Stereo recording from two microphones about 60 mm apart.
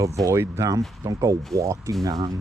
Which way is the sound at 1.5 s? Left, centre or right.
Right.